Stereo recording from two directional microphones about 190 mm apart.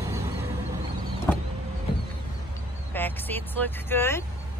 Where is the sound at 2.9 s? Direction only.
10° left (ahead or behind).